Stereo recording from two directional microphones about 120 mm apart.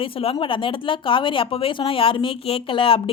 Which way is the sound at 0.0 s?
50° left (ahead or behind).